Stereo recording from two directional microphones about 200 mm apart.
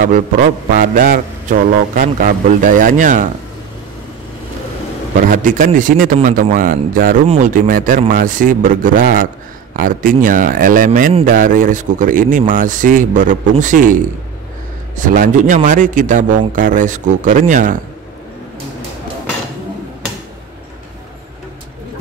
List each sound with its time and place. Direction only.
0.0 s a man's voice: 45° right (ahead or behind)
5.1 s a man's voice: 40° right (ahead or behind)
15.0 s a man's voice: 40° right (ahead or behind)